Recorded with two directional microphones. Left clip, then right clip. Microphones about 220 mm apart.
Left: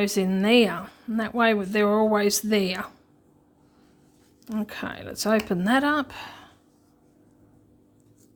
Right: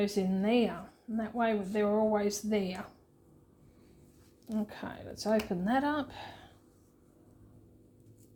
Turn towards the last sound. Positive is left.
turn(degrees=20)  # may be behind; listen again after turning